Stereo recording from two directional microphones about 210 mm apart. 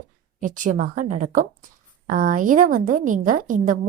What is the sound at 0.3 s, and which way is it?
A woman's voice, 40° right (ahead or behind).